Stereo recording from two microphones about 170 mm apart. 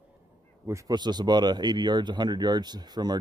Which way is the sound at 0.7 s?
20° right (ahead or behind).